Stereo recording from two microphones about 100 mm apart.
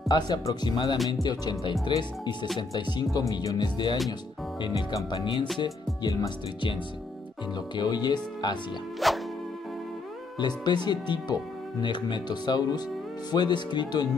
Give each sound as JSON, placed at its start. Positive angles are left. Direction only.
{"t": 0.1, "sound": "speech", "side_deg": 45}
{"t": 0.9, "sound": "music", "side_deg": 0}
{"t": 1.2, "sound": "speech", "side_deg": 40}
{"t": 5.2, "sound": "speech", "side_deg": 55}
{"t": 9.0, "sound": "music", "side_deg": 0}
{"t": 10.4, "sound": "speech", "side_deg": 45}